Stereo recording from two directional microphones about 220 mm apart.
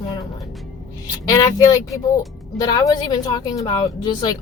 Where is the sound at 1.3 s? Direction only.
15° left (ahead or behind).